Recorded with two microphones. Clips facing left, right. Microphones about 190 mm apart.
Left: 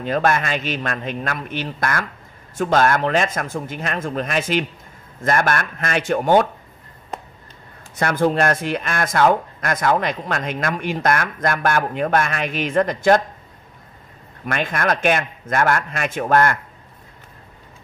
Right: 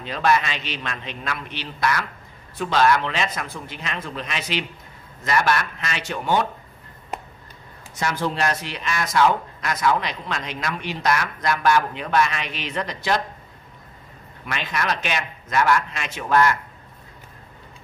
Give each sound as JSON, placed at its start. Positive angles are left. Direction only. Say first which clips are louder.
{"t": 0.0, "sound": "speech", "louder": "left 2 dB", "side_deg": 50}
{"t": 7.9, "sound": "speech", "louder": "left 7 dB", "side_deg": 55}
{"t": 14.4, "sound": "speech", "louder": "left 5 dB", "side_deg": 50}